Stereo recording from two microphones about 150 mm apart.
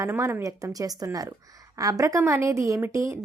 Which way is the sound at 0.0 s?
20° right (ahead or behind).